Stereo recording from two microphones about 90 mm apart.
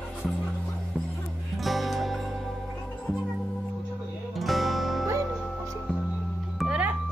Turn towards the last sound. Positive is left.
turn(degrees=-10)  # may be behind; listen again after turning